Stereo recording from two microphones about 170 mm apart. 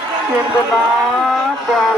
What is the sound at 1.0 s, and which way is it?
Vehicle, centre (ahead or behind).